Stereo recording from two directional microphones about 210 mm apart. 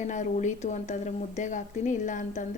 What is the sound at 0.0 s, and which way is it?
A woman's voice, 35° left (ahead or behind).